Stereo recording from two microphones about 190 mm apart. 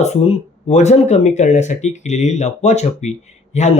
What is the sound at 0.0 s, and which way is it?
Speech, 35° left (ahead or behind).